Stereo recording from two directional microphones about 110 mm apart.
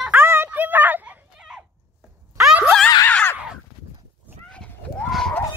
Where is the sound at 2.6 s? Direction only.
5° left (ahead or behind).